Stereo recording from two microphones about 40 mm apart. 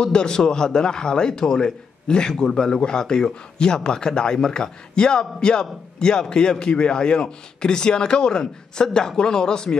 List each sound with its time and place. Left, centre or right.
0.0 s a man's voice: centre